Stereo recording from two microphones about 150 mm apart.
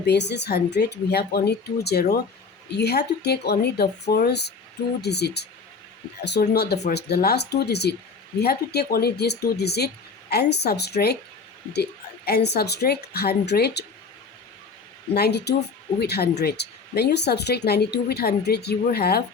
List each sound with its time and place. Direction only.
0.0 s speech: 90° left
15.1 s speech: 90° left